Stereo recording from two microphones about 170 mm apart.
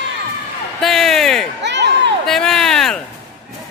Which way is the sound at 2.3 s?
Centre (ahead or behind).